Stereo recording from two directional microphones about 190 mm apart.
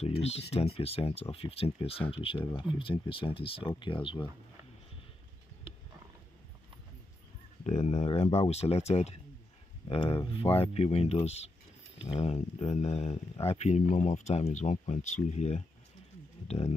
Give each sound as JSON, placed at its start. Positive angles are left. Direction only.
{"t": 0.7, "sound": "speech", "side_deg": 30}
{"t": 7.6, "sound": "speech", "side_deg": 35}